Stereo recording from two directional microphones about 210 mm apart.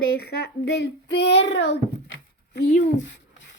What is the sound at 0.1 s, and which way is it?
Speech, 50° left (ahead or behind).